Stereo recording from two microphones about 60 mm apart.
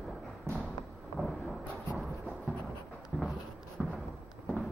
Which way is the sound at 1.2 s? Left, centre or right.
Centre.